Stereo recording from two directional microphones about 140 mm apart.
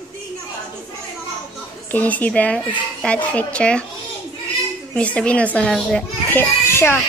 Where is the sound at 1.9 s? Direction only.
10° left (ahead or behind).